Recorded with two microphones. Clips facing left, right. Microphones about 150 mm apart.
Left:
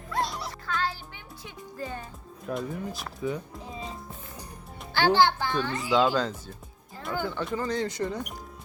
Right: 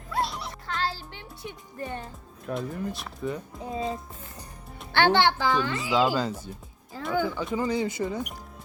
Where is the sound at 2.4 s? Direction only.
Centre (ahead or behind).